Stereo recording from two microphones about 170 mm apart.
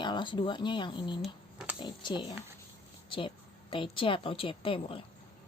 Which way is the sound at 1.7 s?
25° left (ahead or behind).